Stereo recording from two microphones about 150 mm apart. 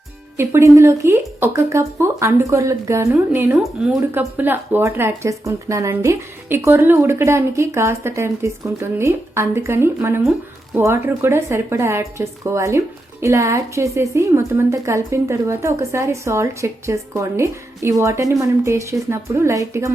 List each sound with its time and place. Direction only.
0.3 s speech: 20° right (ahead or behind)
3.6 s speech: 5° right (ahead or behind)